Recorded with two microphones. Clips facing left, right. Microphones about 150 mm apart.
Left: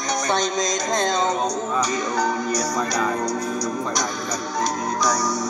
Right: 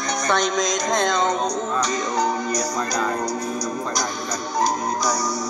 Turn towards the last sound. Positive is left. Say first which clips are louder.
# left 1 dB
turn(degrees=0)  # may be behind; listen again after turning